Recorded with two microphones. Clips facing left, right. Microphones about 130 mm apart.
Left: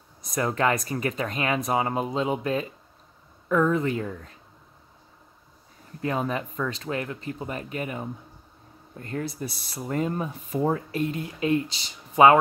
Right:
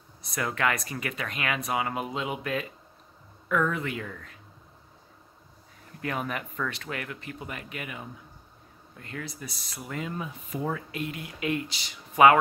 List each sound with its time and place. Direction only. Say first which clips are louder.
0.2 s speech: left 4 dB; 40° left (ahead or behind)
5.9 s speech: left 5 dB; 25° left (ahead or behind)